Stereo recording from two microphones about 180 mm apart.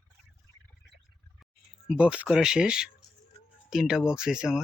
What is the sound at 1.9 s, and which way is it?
Speech, 5° right (ahead or behind).